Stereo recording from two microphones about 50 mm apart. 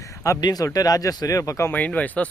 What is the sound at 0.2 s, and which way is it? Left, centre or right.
Speech, left.